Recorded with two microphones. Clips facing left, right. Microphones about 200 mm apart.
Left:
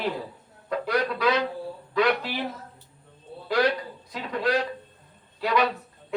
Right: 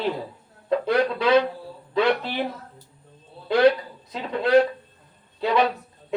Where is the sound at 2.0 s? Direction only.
25° right (ahead or behind).